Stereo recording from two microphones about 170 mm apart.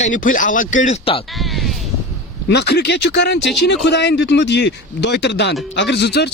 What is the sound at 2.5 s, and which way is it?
Speech, 75° left (ahead or behind).